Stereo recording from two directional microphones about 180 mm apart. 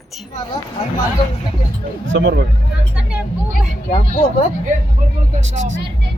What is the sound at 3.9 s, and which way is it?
Speech, 40° left (ahead or behind).